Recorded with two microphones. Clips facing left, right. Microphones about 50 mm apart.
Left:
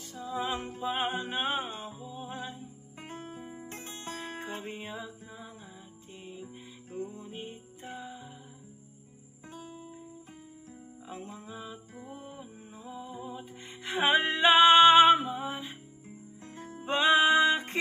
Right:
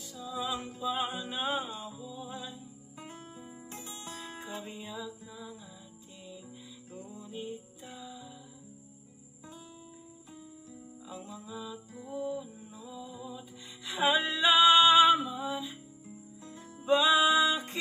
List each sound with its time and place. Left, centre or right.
0.1 s music: left
11.1 s music: left